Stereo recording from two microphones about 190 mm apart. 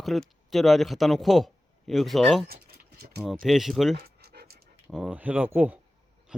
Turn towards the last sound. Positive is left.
turn(degrees=-10)  # may be behind; listen again after turning